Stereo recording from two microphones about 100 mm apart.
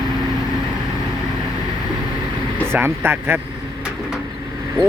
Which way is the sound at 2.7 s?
25° right (ahead or behind).